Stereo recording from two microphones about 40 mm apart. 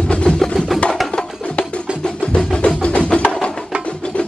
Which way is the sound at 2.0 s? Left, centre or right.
Left.